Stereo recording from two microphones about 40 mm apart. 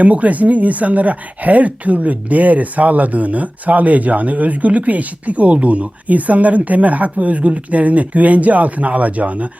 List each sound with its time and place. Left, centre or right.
0.0 s speech: right